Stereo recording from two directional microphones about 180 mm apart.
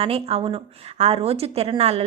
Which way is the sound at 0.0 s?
30° right (ahead or behind).